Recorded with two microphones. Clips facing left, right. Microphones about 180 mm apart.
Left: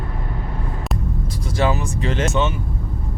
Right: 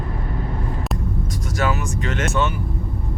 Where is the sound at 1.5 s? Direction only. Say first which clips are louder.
Left 3 dB; 30° left (ahead or behind).